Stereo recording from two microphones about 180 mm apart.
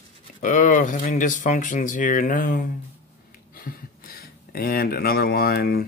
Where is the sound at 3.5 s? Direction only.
55° left (ahead or behind).